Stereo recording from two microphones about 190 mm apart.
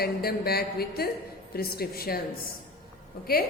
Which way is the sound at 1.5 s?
55° left (ahead or behind).